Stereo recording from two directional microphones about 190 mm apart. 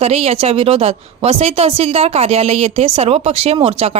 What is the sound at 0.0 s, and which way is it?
A woman's voice, 35° right (ahead or behind).